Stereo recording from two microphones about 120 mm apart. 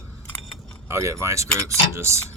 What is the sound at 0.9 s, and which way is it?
Cutlery, 25° right (ahead or behind).